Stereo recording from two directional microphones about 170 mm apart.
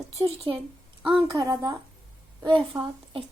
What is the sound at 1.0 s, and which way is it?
A woman's voice, 30° right (ahead or behind).